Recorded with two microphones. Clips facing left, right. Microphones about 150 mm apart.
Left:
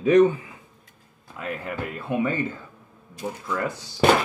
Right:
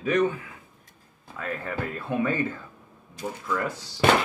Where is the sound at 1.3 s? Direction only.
15° left (ahead or behind).